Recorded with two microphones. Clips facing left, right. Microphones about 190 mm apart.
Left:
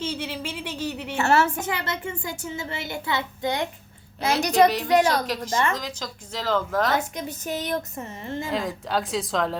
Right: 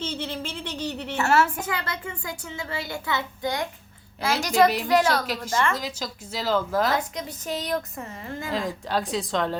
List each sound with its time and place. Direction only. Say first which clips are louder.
0.0 s a sound: left 1 dB; 10° left (ahead or behind)
1.2 s a woman's voice: left 1 dB; 25° left (ahead or behind)
5.7 s speech: right 1 dB; 10° right (ahead or behind)
7.3 s a woman's voice: even; 25° left (ahead or behind)
8.4 s speech: right 1 dB; centre (ahead or behind)